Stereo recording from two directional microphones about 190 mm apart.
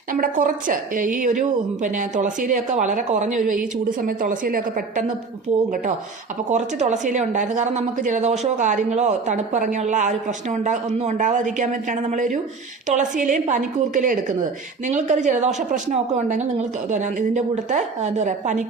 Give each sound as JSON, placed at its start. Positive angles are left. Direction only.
{"t": 0.1, "sound": "a woman's voice", "side_deg": -45}
{"t": 6.5, "sound": "a woman's voice", "side_deg": -40}